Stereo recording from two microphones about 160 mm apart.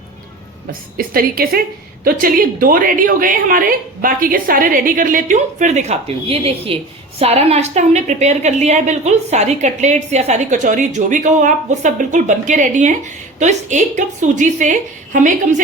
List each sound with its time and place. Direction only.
0.7 s a woman's voice: 65° right (ahead or behind)